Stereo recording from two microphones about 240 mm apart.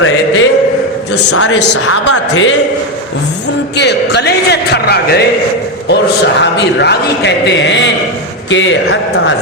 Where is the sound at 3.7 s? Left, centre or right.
Left.